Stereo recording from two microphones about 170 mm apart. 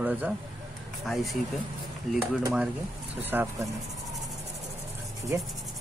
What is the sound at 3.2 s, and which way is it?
Speech, 10° right (ahead or behind).